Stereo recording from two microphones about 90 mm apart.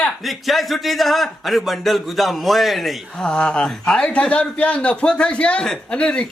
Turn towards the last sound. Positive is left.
turn(degrees=10)  # may be behind; listen again after turning